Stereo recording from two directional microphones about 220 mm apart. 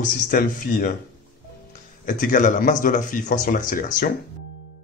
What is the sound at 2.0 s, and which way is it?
Speech, 35° left (ahead or behind).